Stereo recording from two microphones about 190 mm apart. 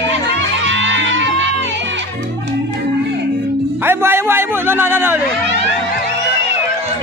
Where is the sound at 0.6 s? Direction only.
80° right.